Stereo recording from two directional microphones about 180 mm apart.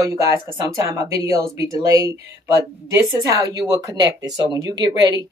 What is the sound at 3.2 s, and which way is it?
Speech, 20° right (ahead or behind).